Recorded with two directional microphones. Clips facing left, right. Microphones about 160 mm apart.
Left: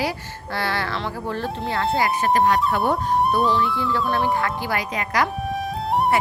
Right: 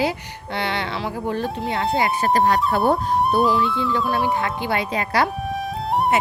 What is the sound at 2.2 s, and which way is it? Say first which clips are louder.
Speech: even; 35° right (ahead or behind).